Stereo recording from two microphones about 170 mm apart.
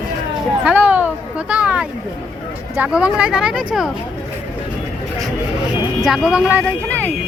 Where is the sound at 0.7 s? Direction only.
10° right (ahead or behind).